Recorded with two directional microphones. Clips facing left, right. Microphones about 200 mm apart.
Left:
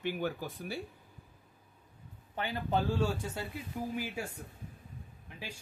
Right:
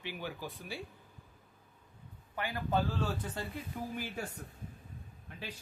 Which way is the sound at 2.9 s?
10° left (ahead or behind).